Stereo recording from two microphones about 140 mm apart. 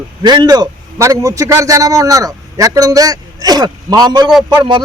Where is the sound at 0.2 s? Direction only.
30° right (ahead or behind).